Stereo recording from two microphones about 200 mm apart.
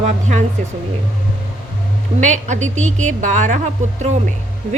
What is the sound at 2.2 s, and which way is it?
A woman's voice, 35° right (ahead or behind).